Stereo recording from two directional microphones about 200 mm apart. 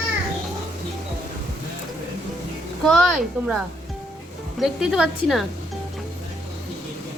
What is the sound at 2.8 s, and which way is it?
A woman's voice, centre (ahead or behind).